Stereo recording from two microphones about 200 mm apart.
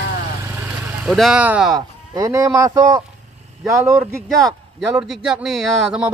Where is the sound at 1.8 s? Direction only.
20° right (ahead or behind).